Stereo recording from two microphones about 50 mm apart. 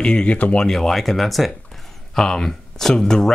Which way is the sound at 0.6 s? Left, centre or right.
Centre.